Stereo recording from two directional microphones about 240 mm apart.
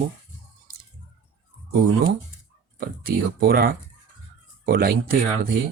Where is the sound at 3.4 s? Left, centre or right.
Right.